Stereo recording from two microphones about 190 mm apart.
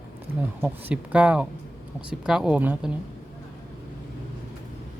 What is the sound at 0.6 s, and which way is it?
Speech, 5° right (ahead or behind).